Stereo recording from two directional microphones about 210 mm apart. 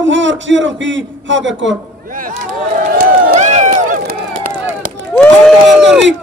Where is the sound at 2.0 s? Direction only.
40° right (ahead or behind).